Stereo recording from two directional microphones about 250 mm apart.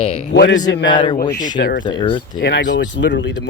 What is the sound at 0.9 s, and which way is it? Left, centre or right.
Speech, centre.